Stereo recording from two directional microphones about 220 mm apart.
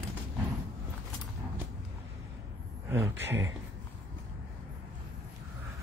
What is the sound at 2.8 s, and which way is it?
Speech, 10° right (ahead or behind).